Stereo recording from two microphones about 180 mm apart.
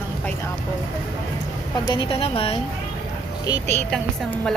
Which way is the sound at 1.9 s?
30° left (ahead or behind).